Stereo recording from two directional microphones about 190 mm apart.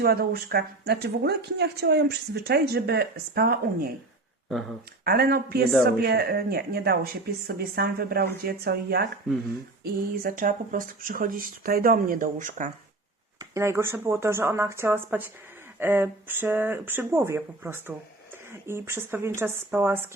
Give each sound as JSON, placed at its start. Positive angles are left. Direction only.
{"t": 0.0, "sound": "speech", "side_deg": -55}
{"t": 5.0, "sound": "speech", "side_deg": -55}
{"t": 10.1, "sound": "speech", "side_deg": -45}
{"t": 13.4, "sound": "speech", "side_deg": -15}